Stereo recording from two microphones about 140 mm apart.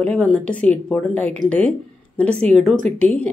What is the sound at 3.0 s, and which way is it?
Speech, 10° left (ahead or behind).